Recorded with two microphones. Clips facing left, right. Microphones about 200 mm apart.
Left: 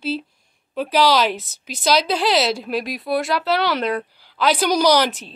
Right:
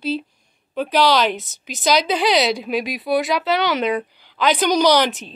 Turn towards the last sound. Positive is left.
turn(degrees=0)  # may be behind; listen again after turning